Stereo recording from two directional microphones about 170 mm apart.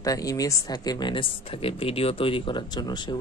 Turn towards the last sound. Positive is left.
turn(degrees=25)  # may be behind; listen again after turning